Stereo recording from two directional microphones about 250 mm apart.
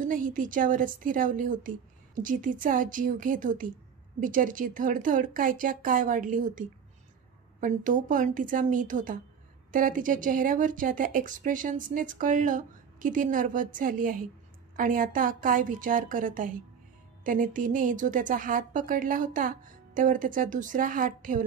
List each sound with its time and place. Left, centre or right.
0.0 s a woman's voice: right